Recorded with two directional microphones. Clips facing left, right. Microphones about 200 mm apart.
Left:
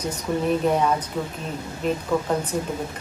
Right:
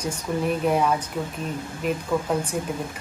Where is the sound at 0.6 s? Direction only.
10° right (ahead or behind).